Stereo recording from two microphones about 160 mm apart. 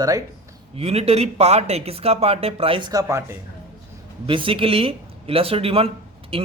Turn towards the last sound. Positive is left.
turn(degrees=-35)  # may be behind; listen again after turning